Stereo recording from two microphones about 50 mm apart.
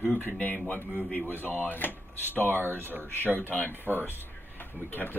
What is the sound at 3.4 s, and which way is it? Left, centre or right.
Speech, left.